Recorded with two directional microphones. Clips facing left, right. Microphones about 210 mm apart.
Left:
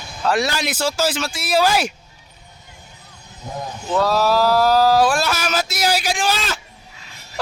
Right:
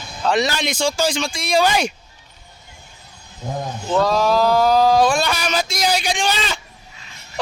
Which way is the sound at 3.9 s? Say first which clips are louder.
Right 1 dB; 5° left (ahead or behind).